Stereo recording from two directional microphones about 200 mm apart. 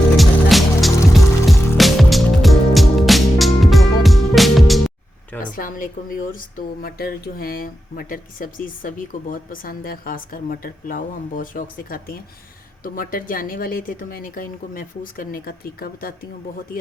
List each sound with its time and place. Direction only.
0.2 s music: centre (ahead or behind)
5.4 s a woman's voice: 45° left (ahead or behind)